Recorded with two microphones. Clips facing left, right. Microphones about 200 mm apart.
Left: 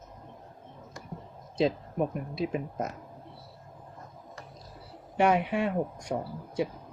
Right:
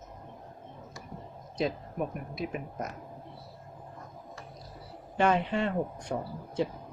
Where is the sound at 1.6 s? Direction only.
25° left (ahead or behind).